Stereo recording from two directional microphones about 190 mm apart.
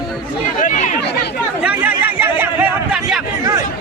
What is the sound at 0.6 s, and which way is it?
Chatter, 40° left (ahead or behind).